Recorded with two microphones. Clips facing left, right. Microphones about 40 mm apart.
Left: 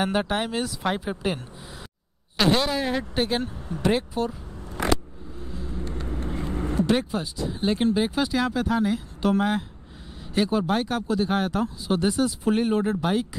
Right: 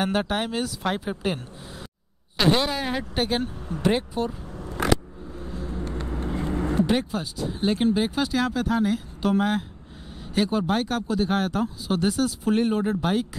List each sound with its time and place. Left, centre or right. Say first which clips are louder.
0.0 s speech: even; centre
5.4 s vehicle: right 2 dB; centre
6.0 s vehicle: right 3 dB; right
6.9 s speech: left 1 dB; centre